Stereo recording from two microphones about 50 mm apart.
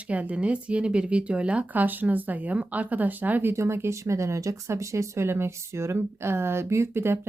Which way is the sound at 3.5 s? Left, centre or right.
Right.